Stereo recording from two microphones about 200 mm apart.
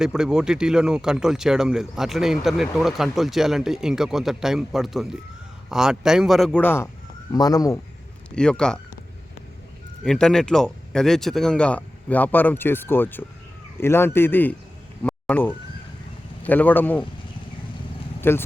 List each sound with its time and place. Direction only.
0.0 s a man's voice: 5° right (ahead or behind); by 7.8 s 15° left (ahead or behind)
8.4 s speech: 5° left (ahead or behind)
10.0 s a man's voice: 5° left (ahead or behind)
18.2 s speech: 10° left (ahead or behind)